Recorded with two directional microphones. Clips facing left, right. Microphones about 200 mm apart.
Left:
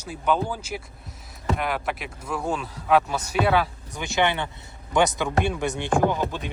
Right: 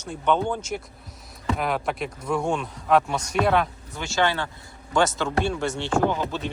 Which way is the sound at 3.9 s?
15° left (ahead or behind).